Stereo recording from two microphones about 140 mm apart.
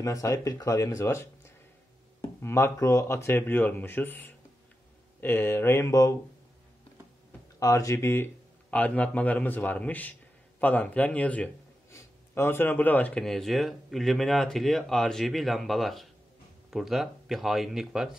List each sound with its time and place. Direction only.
0.0 s speech: 25° left (ahead or behind)
7.5 s speech: 25° left (ahead or behind); by 18.1 s centre (ahead or behind)